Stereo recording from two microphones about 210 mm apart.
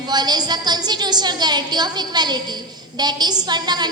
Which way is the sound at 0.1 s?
20° right (ahead or behind).